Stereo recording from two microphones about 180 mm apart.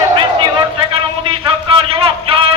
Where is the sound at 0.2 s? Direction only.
30° right (ahead or behind).